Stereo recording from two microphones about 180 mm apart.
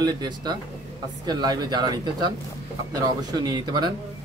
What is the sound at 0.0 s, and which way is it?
Speech, 25° right (ahead or behind).